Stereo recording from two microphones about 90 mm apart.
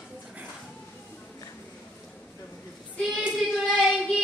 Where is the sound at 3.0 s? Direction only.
Centre (ahead or behind).